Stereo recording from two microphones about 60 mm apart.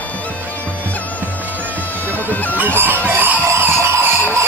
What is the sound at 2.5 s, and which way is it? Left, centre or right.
Chicken, right.